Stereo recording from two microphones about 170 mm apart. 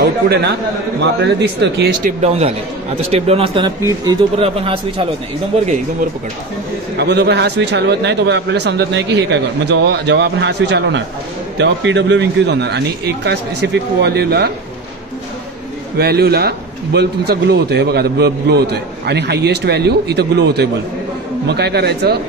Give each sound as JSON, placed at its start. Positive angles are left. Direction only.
{"t": 0.0, "sound": "a man's voice", "side_deg": -70}
{"t": 1.2, "sound": "speech", "side_deg": -90}
{"t": 2.0, "sound": "speech", "side_deg": -40}
{"t": 4.4, "sound": "speech", "side_deg": -35}
{"t": 7.0, "sound": "a man's voice", "side_deg": -85}
{"t": 16.0, "sound": "a man's voice", "side_deg": -70}